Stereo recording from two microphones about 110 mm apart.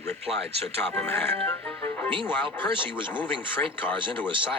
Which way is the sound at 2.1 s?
50° right (ahead or behind).